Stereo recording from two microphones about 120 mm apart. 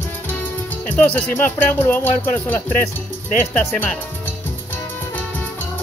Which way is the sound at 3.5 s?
5° left (ahead or behind).